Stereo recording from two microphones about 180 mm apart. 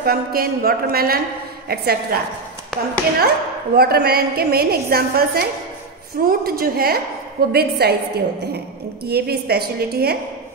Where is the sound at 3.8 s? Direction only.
60° right (ahead or behind).